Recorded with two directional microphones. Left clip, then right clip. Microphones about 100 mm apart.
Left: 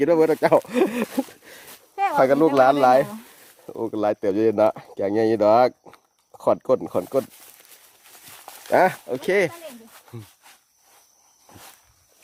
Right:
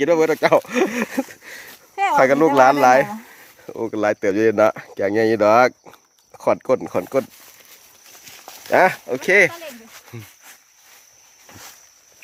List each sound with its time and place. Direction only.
0.0 s speech: 35° left (ahead or behind); by 1.6 s 15° left (ahead or behind)
2.1 s speech: 5° left (ahead or behind)
8.6 s speech: 10° left (ahead or behind)